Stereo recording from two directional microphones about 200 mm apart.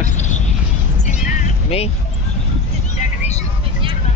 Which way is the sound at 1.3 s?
35° left (ahead or behind).